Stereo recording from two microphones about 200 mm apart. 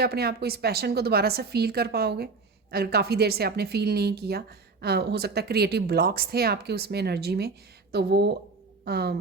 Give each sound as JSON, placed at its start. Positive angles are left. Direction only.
{"t": 0.0, "sound": "speech", "side_deg": -50}